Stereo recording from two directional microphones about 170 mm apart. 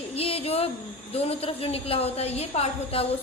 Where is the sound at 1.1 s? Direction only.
35° left (ahead or behind).